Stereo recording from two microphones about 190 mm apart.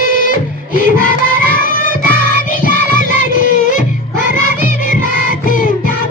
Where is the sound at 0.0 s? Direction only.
45° left (ahead or behind).